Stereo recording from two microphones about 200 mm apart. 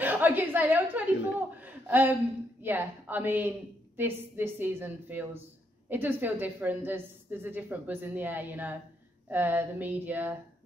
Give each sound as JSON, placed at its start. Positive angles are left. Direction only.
{"t": 0.0, "sound": "chuckle", "side_deg": -10}
{"t": 2.6, "sound": "speech", "side_deg": -10}